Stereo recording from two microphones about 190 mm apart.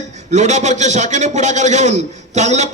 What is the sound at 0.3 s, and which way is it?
Speech, 35° right (ahead or behind).